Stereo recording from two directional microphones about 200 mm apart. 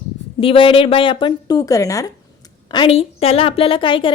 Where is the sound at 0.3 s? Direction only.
25° left (ahead or behind).